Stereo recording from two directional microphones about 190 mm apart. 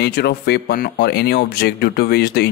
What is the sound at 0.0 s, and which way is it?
Speech, 60° left (ahead or behind).